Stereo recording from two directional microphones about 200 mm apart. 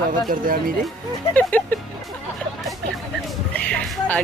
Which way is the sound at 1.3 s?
10° left (ahead or behind).